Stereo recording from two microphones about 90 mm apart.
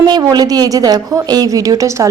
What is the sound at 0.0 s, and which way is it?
A woman's voice, 45° right (ahead or behind).